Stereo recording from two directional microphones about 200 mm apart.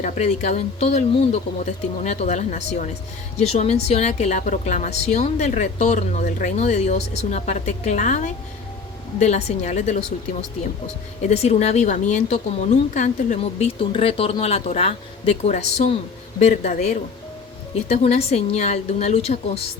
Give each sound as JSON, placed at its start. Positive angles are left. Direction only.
{"t": 0.0, "sound": "a woman's voice", "side_deg": 35}
{"t": 11.2, "sound": "a woman's voice", "side_deg": 35}